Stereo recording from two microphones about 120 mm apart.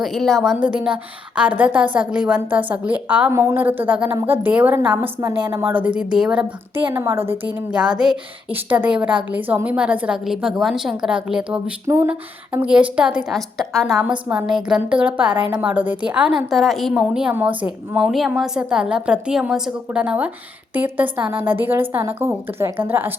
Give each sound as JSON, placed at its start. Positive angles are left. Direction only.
{"t": 0.0, "sound": "a woman's voice", "side_deg": 0}
{"t": 0.6, "sound": "a woman's voice", "side_deg": -10}
{"t": 6.9, "sound": "a woman's voice", "side_deg": -20}
{"t": 14.0, "sound": "a woman's voice", "side_deg": -10}